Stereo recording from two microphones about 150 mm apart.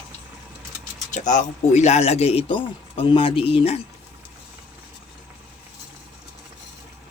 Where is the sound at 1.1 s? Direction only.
55° left (ahead or behind); by 3.8 s 40° left (ahead or behind).